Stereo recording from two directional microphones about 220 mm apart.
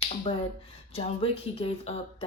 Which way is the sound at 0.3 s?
25° left (ahead or behind).